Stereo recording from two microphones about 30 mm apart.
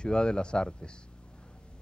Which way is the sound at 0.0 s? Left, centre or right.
Left.